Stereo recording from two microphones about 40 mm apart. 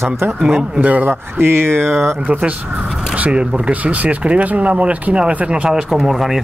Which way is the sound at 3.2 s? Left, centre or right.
Right.